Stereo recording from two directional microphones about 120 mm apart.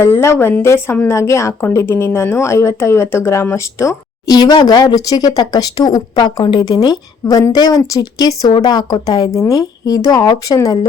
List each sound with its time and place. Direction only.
0.0 s speech: 20° left (ahead or behind)